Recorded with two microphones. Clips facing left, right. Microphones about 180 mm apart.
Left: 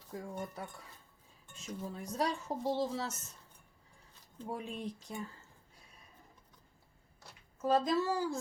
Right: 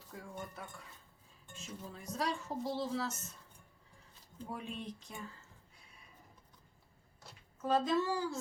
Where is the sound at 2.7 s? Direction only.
35° left (ahead or behind).